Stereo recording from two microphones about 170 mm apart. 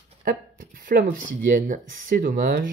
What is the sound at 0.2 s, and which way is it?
Speech, 60° right (ahead or behind).